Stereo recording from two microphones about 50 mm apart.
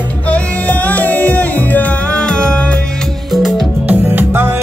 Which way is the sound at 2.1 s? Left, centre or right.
Left.